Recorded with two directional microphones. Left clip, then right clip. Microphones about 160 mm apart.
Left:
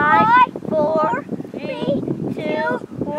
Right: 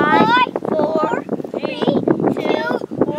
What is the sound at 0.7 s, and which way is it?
Speech, 15° right (ahead or behind).